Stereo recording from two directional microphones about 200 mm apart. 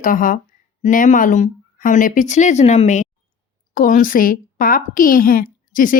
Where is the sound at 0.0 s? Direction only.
40° left (ahead or behind).